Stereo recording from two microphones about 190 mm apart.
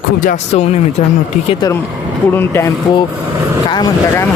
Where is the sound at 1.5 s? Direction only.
20° left (ahead or behind).